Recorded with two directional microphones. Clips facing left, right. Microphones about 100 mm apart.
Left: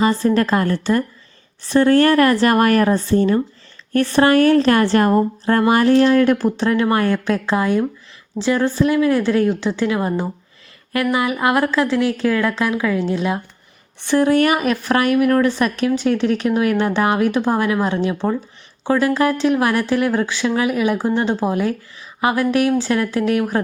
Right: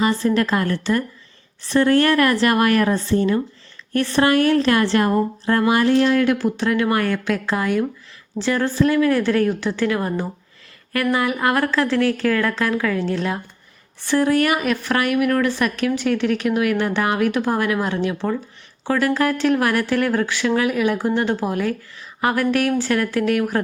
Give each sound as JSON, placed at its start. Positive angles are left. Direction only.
{"t": 0.3, "sound": "a woman's voice", "side_deg": 35}